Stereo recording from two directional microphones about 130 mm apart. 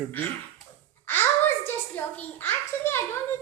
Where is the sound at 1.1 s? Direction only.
15° left (ahead or behind).